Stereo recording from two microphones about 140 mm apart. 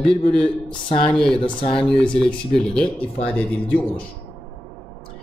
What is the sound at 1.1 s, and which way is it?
Speech, 5° left (ahead or behind).